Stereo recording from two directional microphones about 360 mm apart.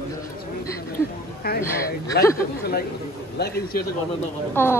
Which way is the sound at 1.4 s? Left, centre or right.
Left.